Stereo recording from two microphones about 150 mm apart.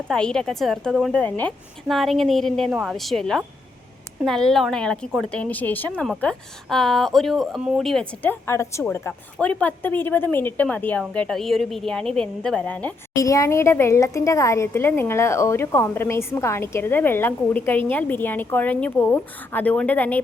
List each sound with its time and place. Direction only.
0.1 s a woman's voice: 5° left (ahead or behind)
13.1 s a woman's voice: 20° left (ahead or behind)